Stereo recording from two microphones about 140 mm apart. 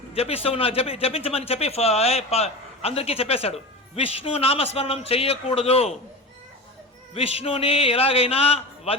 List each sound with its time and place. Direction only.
0.1 s a man's voice: 45° left (ahead or behind)
7.1 s a man's voice: 45° left (ahead or behind)